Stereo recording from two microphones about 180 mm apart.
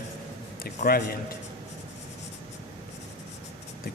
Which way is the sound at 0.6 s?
55° left (ahead or behind).